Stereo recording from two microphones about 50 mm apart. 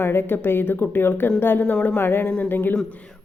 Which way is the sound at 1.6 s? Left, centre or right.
Left.